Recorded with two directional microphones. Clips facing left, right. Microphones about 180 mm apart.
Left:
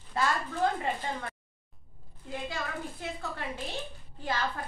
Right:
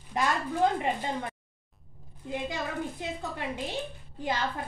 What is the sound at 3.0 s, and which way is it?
A woman's voice, 15° right (ahead or behind).